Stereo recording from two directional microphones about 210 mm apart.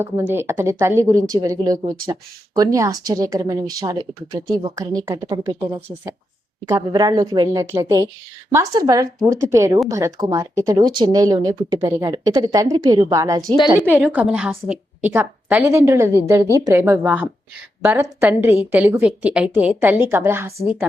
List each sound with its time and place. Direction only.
0.0 s a woman's voice: 10° right (ahead or behind)